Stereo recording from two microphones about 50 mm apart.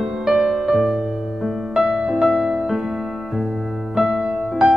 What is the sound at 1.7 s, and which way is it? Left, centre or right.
Music, right.